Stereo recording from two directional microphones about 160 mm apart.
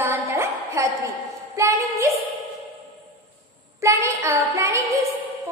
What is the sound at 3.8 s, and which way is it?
Child singing, 20° right (ahead or behind).